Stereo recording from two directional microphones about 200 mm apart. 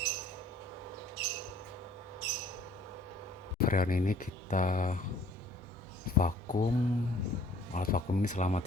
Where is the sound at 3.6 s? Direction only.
45° left (ahead or behind).